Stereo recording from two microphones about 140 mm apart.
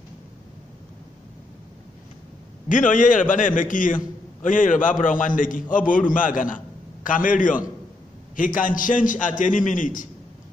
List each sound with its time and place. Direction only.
2.7 s a man's voice: 65° left (ahead or behind)